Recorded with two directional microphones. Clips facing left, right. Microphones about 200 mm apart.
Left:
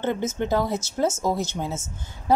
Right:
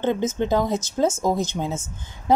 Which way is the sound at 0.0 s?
15° right (ahead or behind).